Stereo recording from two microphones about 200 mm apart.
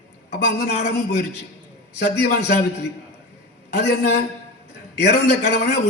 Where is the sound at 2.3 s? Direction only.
55° left (ahead or behind).